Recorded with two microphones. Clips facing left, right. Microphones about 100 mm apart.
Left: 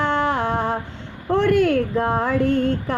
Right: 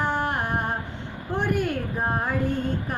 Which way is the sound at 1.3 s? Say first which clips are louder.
Left 9 dB; 90° left.